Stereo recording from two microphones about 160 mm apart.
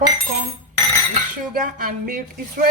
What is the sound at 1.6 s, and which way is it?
Speech, 60° right (ahead or behind).